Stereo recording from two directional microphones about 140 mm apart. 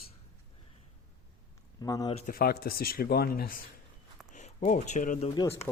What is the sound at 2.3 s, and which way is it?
Speech, 90° left.